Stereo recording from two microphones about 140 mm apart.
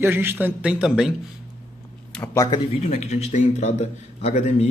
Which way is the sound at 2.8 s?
55° left (ahead or behind).